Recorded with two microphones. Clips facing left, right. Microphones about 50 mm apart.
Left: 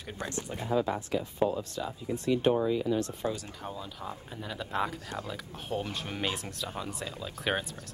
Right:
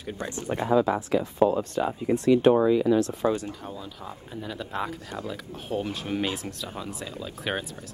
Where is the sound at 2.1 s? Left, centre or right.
Right.